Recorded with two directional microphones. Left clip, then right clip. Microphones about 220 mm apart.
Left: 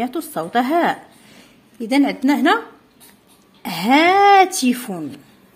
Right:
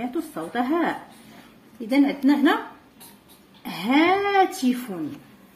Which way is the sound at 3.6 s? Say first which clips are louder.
Left 6 dB; 50° left (ahead or behind).